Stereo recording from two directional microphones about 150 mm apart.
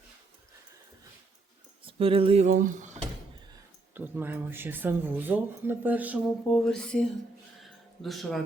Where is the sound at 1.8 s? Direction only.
40° right (ahead or behind); by 3.0 s 55° right (ahead or behind).